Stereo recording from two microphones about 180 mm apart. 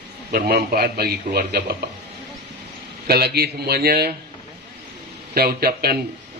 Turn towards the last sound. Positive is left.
turn(degrees=-60)  # may be behind; listen again after turning